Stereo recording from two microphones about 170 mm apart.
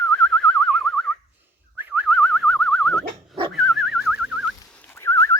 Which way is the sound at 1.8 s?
5° right (ahead or behind).